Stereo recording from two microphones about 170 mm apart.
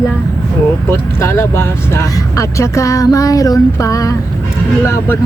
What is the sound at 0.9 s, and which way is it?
Speech, 15° left (ahead or behind).